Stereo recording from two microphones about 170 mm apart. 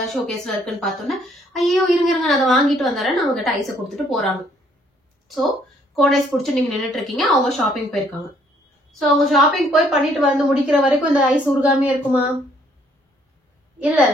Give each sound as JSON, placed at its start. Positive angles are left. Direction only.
{"t": 0.0, "sound": "a woman's voice", "side_deg": 0}
{"t": 5.9, "sound": "a woman's voice", "side_deg": 0}